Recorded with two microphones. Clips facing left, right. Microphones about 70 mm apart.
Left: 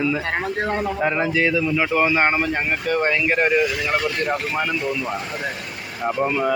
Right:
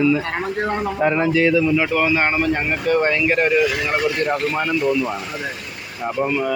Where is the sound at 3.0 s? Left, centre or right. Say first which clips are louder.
Right 2 dB; centre.